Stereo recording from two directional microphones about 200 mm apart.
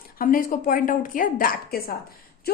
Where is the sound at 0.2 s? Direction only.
45° left (ahead or behind).